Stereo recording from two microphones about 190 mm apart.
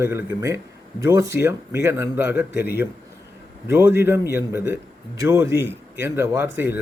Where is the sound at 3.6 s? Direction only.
10° right (ahead or behind).